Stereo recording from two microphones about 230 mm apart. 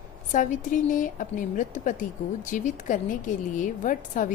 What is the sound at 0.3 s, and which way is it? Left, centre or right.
A woman's voice, left.